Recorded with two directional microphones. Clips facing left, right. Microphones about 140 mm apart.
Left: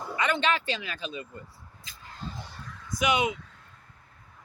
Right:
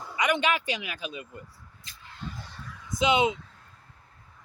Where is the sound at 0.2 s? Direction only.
15° right (ahead or behind).